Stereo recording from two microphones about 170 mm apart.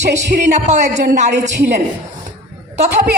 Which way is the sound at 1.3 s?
90° right.